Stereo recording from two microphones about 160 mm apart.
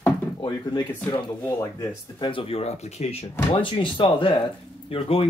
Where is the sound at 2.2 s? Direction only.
30° left (ahead or behind).